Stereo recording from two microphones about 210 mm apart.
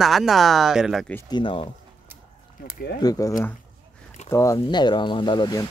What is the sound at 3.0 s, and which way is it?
Speech, 15° left (ahead or behind).